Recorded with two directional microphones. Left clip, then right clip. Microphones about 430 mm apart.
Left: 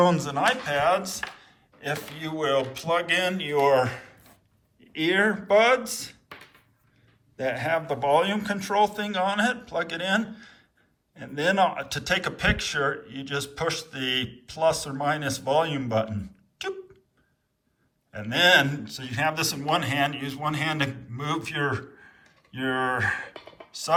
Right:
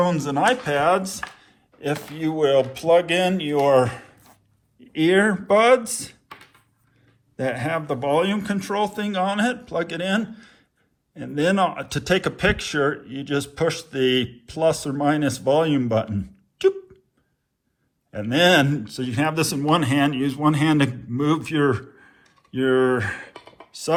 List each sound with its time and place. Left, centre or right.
0.0 s a man's voice: centre
7.3 s a man's voice: centre
18.1 s speech: centre